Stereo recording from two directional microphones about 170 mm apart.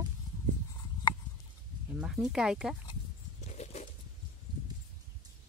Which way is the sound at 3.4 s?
40° left (ahead or behind).